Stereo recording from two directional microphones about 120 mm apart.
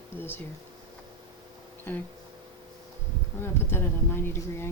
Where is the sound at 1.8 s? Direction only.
15° left (ahead or behind).